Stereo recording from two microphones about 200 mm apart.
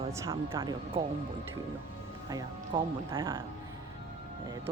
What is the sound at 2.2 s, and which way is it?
Speech, 20° right (ahead or behind).